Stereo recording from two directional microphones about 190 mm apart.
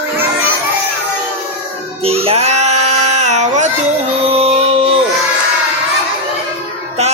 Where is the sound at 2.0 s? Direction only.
30° right (ahead or behind).